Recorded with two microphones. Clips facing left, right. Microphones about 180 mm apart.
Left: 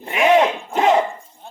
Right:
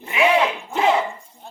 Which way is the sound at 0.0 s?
40° left (ahead or behind).